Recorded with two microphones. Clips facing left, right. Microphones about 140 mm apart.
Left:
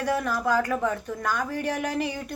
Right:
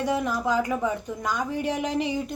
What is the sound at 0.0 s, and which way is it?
Speech, 20° right (ahead or behind).